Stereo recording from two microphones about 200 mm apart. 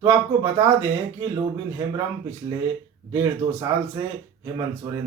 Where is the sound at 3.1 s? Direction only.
15° right (ahead or behind).